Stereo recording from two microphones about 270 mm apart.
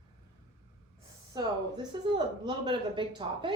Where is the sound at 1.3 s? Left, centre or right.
Centre.